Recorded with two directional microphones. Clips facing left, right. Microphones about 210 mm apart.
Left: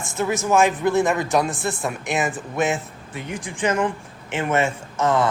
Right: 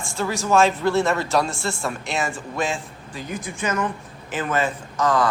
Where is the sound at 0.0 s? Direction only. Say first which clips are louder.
Left 2 dB; 20° left (ahead or behind).